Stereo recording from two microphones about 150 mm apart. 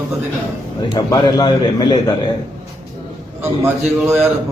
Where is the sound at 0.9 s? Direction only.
30° left (ahead or behind).